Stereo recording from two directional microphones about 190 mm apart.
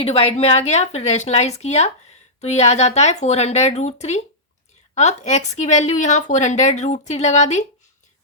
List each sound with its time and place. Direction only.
0.0 s a woman's voice: 30° left (ahead or behind)